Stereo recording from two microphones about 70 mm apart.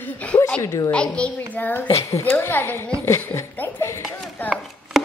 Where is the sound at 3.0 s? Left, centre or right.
Left.